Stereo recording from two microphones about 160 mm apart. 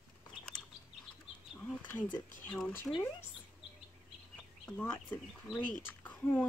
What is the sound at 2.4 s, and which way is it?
Speech, 10° left (ahead or behind).